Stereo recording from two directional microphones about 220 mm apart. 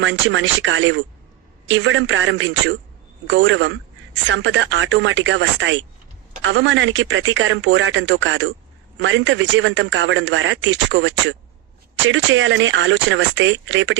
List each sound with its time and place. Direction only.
0.0 s a man's voice: 60° right (ahead or behind)